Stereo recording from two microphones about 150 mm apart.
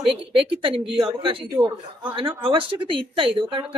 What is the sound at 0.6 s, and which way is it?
A woman's voice, 35° right (ahead or behind).